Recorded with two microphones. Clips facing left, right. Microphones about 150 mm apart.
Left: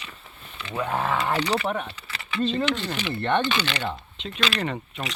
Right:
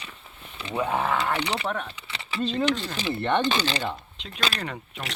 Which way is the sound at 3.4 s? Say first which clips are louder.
Right 1 dB; 35° right (ahead or behind).